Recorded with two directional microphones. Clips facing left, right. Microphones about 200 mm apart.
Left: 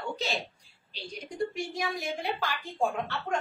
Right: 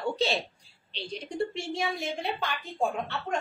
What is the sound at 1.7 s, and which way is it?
Speech, 25° right (ahead or behind).